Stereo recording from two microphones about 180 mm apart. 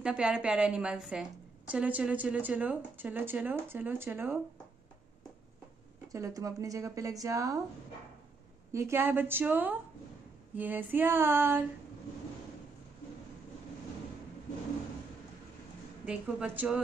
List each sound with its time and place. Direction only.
0.0 s a woman's voice: 5° right (ahead or behind)
6.1 s a woman's voice: 15° right (ahead or behind)
8.7 s a woman's voice: 15° right (ahead or behind)
16.1 s a woman's voice: 5° right (ahead or behind)